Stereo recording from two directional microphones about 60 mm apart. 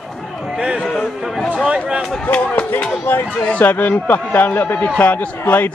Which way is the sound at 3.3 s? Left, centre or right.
Left.